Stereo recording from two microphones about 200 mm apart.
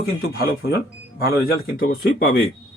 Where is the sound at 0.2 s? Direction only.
50° left (ahead or behind).